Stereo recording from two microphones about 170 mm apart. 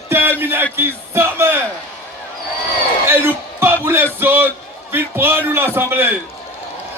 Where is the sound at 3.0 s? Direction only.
15° right (ahead or behind).